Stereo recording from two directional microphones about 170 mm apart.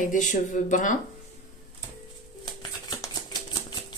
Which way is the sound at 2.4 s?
25° left (ahead or behind).